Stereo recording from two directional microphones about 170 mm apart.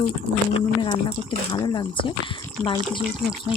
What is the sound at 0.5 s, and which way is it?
A woman's voice, 30° left (ahead or behind).